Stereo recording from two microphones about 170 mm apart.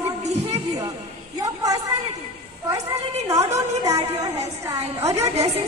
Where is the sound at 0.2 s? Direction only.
40° right (ahead or behind).